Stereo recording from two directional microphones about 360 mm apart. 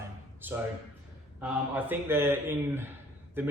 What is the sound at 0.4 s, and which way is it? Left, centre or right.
Speech, centre.